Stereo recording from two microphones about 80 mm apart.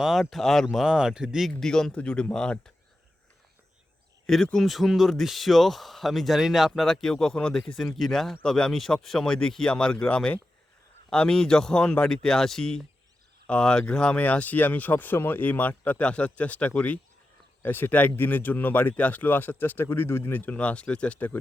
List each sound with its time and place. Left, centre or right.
0.0 s speech: centre
0.9 s speech: centre
1.5 s speech: centre
4.5 s speech: centre